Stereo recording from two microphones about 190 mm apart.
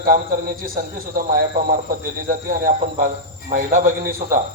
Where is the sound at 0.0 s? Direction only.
45° right (ahead or behind).